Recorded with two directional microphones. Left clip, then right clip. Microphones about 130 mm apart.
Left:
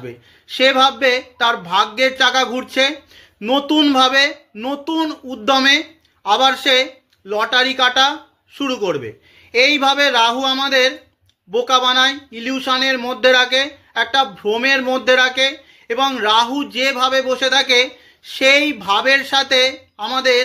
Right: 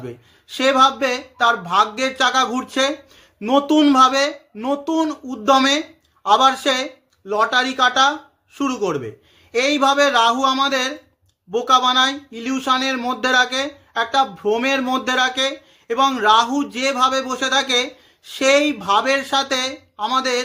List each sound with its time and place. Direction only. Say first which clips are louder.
0.6 s speech: left 2 dB; 40° right (ahead or behind)